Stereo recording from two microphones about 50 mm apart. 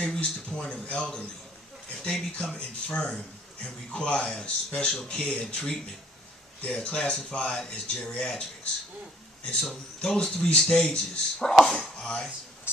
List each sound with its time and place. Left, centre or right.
0.2 s speech: left
9.6 s speech: centre
12.7 s speech: left